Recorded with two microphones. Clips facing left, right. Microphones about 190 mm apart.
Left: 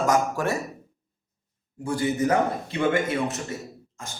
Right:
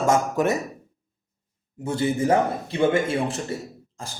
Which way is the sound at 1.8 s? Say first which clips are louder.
Right 1 dB; 25° right (ahead or behind).